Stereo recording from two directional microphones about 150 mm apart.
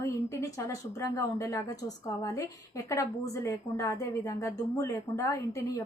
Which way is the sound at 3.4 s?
20° left (ahead or behind).